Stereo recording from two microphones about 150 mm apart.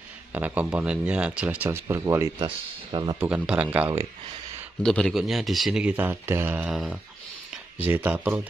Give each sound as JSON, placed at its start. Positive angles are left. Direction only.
{"t": 0.3, "sound": "speech", "side_deg": -10}
{"t": 2.4, "sound": "speech", "side_deg": -30}
{"t": 3.2, "sound": "speech", "side_deg": -10}
{"t": 4.8, "sound": "speech", "side_deg": 5}